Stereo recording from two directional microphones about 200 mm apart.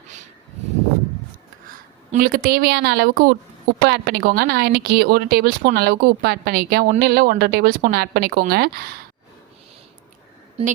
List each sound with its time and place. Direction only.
2.1 s a woman's voice: 45° right (ahead or behind)
10.6 s a woman's voice: 30° right (ahead or behind)